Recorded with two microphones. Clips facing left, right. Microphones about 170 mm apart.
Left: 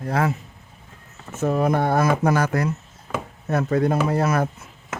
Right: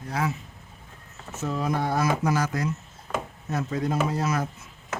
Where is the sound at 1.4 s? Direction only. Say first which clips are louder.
Left 7 dB; 55° left (ahead or behind).